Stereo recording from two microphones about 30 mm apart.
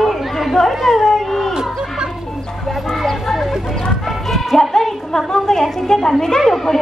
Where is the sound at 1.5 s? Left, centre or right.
Right.